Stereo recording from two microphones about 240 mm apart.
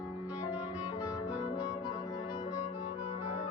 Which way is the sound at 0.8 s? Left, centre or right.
Centre.